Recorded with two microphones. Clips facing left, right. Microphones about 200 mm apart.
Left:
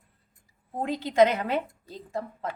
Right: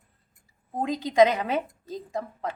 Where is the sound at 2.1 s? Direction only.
15° right (ahead or behind).